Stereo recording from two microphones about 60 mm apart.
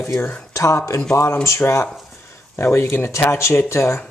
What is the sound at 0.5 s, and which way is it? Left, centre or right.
Speech, left.